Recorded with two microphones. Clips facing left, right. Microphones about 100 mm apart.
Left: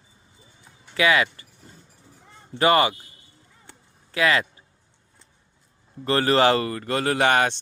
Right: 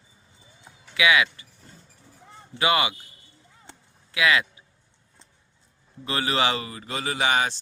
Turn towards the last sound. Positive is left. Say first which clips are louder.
# left 4 dB
turn(degrees=55)  # may be behind; listen again after turning